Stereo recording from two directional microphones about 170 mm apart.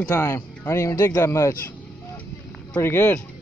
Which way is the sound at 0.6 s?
15° left (ahead or behind).